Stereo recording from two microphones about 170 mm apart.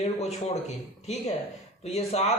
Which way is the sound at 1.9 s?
40° left (ahead or behind).